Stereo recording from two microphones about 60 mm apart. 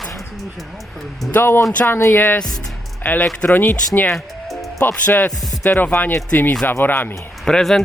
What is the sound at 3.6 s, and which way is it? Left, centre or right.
Speech, left.